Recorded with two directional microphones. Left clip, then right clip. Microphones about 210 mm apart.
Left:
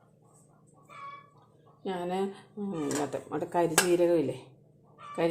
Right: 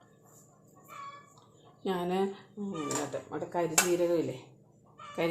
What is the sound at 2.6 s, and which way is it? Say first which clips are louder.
Speech: left 3 dB; 30° left (ahead or behind).